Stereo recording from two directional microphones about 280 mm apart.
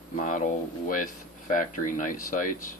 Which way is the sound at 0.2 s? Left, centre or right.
Left.